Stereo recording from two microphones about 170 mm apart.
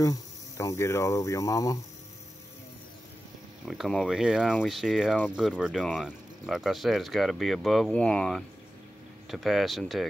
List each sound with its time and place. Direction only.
0.0 s speech: 20° left (ahead or behind)
3.6 s speech: centre (ahead or behind)